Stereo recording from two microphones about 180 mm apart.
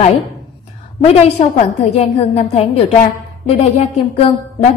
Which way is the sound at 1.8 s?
35° left (ahead or behind).